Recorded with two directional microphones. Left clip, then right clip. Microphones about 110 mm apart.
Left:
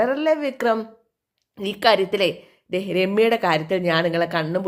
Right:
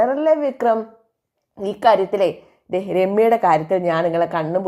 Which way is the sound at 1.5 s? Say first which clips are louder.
Right 3 dB; 20° left (ahead or behind).